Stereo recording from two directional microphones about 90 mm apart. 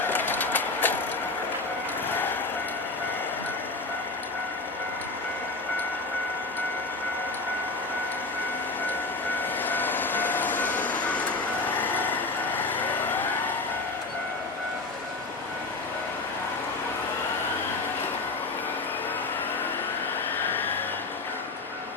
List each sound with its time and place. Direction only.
0.0 s vehicle: 20° left (ahead or behind)
8.9 s vehicle: 20° left (ahead or behind)